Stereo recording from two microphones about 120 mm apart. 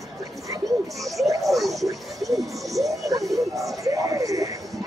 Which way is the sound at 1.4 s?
Centre (ahead or behind).